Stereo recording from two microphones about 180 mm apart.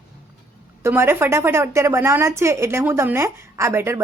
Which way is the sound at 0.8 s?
15° right (ahead or behind).